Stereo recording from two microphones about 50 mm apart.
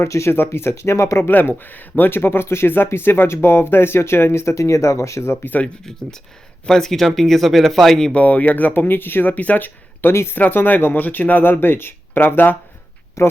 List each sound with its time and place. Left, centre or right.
0.0 s speech: left
0.3 s speech: left
0.7 s speech: left
1.7 s speech: left
2.6 s speech: left
6.7 s speech: centre
8.1 s speech: left
10.1 s speech: left
10.3 s speech: left
13.2 s speech: left